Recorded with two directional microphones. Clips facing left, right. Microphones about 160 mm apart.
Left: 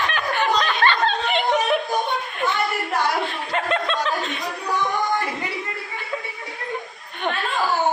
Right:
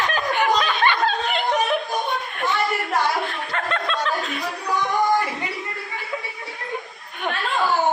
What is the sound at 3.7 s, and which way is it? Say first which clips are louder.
Chuckle: even; centre (ahead or behind).